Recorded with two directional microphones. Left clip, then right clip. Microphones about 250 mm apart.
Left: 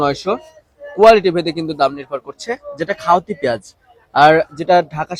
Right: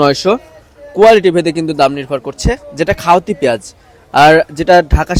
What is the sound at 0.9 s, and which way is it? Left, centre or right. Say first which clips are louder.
Speech: right 3 dB; right.